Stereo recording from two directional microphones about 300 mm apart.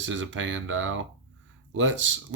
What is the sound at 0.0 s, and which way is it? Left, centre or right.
Speech, right.